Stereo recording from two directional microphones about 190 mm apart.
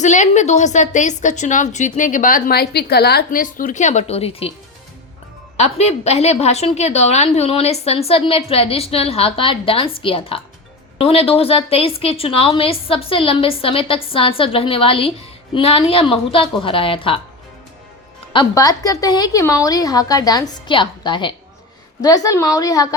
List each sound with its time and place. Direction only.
0.0 s a woman's voice: 40° left (ahead or behind)
5.5 s a woman's voice: 35° left (ahead or behind)
18.3 s a woman's voice: 20° left (ahead or behind)